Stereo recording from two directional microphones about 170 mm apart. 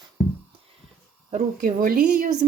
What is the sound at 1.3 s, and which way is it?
A woman's voice, 55° right (ahead or behind).